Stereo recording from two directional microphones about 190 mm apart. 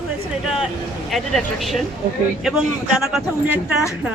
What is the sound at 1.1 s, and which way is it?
Speech, centre (ahead or behind).